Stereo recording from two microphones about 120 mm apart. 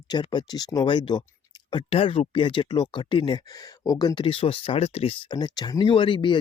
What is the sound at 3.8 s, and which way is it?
Speech, 35° left (ahead or behind).